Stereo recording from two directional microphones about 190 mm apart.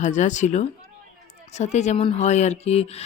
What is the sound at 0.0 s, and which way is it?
A woman's voice, 40° left (ahead or behind).